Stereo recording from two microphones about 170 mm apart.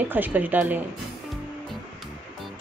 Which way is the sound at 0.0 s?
10° right (ahead or behind).